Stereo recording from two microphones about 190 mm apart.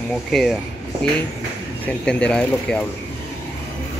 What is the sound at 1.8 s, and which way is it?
Speech, 5° left (ahead or behind).